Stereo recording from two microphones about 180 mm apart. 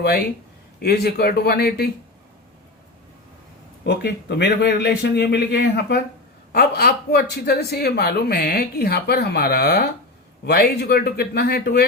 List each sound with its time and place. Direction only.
0.8 s a man's voice: 65° left (ahead or behind)
3.8 s a man's voice: 70° left (ahead or behind)